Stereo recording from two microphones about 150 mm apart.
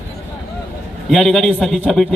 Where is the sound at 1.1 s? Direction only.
Centre (ahead or behind).